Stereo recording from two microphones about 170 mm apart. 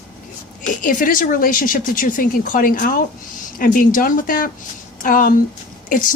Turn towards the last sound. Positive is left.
turn(degrees=55)  # may be behind; listen again after turning